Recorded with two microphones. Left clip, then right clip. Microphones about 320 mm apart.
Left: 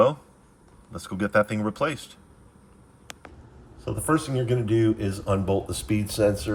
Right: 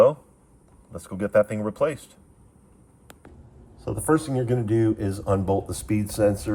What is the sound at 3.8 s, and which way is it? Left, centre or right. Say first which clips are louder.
Speech: right 2 dB; centre.